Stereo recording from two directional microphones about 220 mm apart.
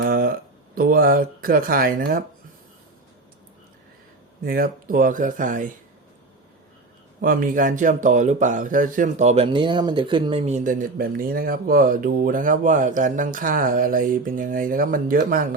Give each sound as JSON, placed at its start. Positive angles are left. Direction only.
{"t": 0.0, "sound": "a sound", "side_deg": -40}
{"t": 0.8, "sound": "speech", "side_deg": -40}
{"t": 4.4, "sound": "speech", "side_deg": -40}
{"t": 7.2, "sound": "speech", "side_deg": -40}